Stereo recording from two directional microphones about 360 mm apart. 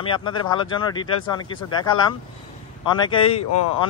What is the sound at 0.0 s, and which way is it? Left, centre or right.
Speech, centre.